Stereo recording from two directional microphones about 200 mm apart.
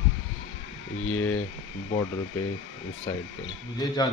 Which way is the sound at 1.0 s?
90° left.